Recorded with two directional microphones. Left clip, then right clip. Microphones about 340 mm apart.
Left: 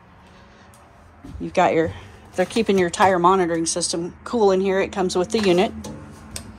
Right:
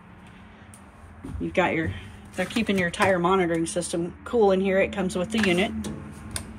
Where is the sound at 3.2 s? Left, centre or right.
Left.